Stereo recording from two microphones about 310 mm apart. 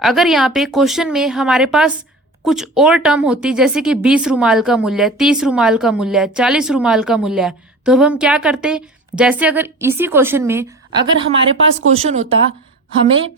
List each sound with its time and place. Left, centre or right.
0.0 s speech: centre; by 12.4 s right